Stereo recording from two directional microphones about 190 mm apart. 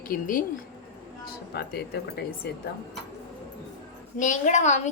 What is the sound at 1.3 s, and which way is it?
A woman's voice, 55° left (ahead or behind).